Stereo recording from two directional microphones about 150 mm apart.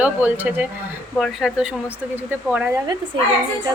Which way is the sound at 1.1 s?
Centre (ahead or behind).